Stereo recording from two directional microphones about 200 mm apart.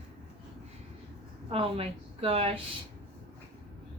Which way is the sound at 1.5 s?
30° right (ahead or behind).